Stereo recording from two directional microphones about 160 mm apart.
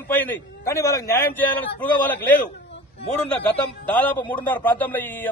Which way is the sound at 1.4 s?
10° left (ahead or behind).